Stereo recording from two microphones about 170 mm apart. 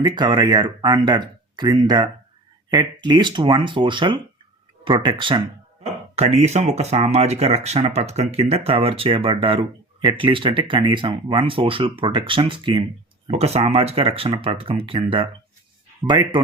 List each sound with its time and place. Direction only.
0.0 s speech: 25° right (ahead or behind)